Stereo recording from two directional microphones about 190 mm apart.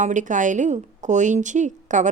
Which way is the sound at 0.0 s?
40° right (ahead or behind).